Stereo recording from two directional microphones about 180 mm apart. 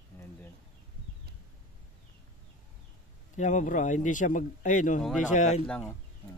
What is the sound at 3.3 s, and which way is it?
Speech, 40° left (ahead or behind).